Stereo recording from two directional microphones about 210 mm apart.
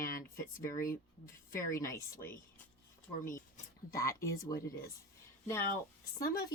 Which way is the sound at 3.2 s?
40° left (ahead or behind).